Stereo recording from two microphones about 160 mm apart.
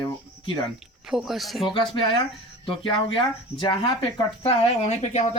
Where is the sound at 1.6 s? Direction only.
30° left (ahead or behind).